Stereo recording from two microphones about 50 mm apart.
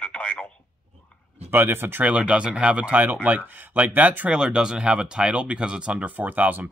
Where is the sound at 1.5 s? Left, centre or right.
Right.